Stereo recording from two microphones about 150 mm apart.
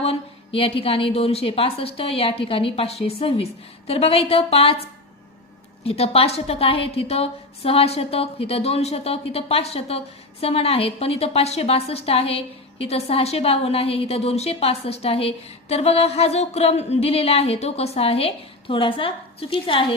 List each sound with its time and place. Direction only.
0.0 s a woman's voice: 40° left (ahead or behind)